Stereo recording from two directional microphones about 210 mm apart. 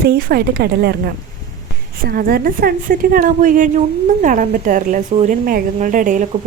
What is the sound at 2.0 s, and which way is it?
A woman's voice, 45° right (ahead or behind).